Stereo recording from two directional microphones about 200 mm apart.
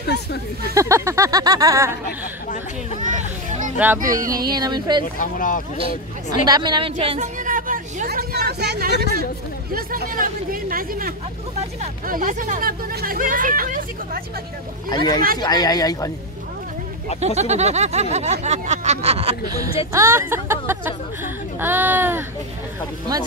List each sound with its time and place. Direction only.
0.7 s speech: 15° right (ahead or behind)
3.0 s hubbub: 40° right (ahead or behind)
3.7 s speech: 10° right (ahead or behind)
4.0 s speech: 45° right (ahead or behind)
4.3 s a woman's voice: 20° right (ahead or behind)
5.2 s speech: 40° left (ahead or behind)
6.4 s a woman's voice: 20° right (ahead or behind)
7.2 s speech: 40° right (ahead or behind)
14.9 s speech: 20° left (ahead or behind)
17.4 s speech: 35° right (ahead or behind)
19.9 s speech: 15° right (ahead or behind)